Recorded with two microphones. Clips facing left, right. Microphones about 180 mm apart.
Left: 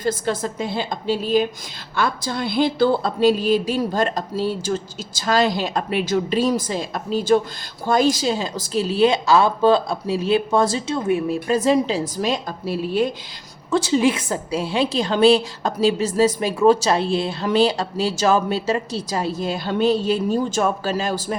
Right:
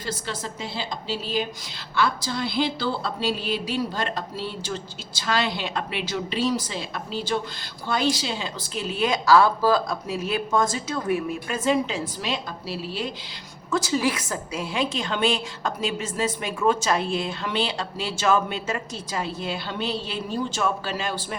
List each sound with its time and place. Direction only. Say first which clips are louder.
0.0 s a woman's voice: left 9 dB; 50° left (ahead or behind)
13.7 s a woman's voice: left 6 dB; 30° left (ahead or behind)